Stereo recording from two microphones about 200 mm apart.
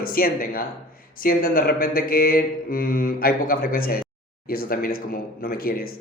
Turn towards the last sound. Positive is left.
turn(degrees=50)  # may be behind; listen again after turning